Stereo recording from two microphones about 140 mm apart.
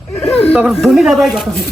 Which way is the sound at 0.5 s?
5° right (ahead or behind).